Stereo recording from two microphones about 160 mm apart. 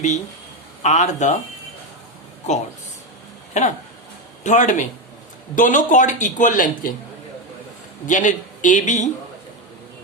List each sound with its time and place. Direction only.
0.8 s a man's voice: 45° left (ahead or behind)
3.6 s a man's voice: 45° left (ahead or behind)
8.0 s a man's voice: 50° left (ahead or behind)